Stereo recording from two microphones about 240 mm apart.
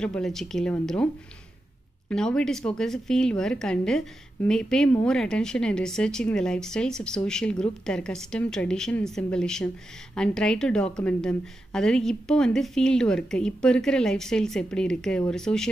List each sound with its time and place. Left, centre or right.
0.0 s speech: centre
2.0 s speech: centre